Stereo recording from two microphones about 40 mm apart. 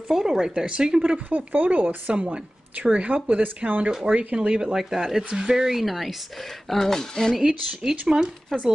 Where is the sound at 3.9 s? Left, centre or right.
Right.